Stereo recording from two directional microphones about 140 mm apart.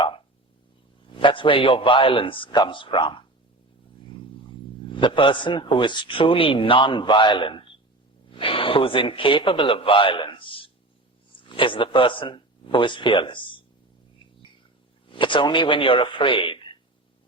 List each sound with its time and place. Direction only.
1.1 s a man's voice: 35° left (ahead or behind)
4.1 s a sound: 35° left (ahead or behind)
4.9 s a man's voice: 35° left (ahead or behind)
15.1 s speech: 35° left (ahead or behind)